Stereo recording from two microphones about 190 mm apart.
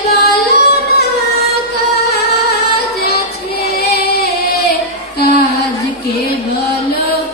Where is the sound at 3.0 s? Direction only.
55° left (ahead or behind).